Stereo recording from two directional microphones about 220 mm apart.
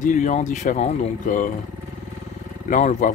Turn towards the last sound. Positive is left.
turn(degrees=35)  # may be behind; listen again after turning